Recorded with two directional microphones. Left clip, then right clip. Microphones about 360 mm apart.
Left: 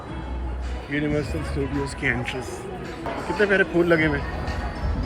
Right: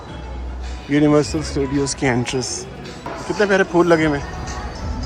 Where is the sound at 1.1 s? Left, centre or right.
Right.